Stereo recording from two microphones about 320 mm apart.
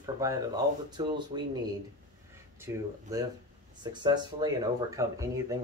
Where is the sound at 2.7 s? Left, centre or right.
Centre.